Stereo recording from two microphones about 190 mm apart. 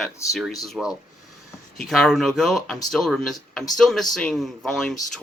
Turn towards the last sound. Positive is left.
turn(degrees=0)  # may be behind; listen again after turning